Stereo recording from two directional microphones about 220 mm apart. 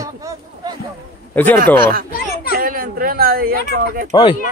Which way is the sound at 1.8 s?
40° right (ahead or behind).